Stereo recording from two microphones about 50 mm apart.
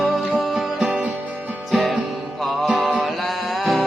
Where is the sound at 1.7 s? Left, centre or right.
Centre.